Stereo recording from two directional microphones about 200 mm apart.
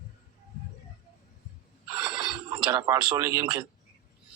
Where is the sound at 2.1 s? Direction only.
20° right (ahead or behind).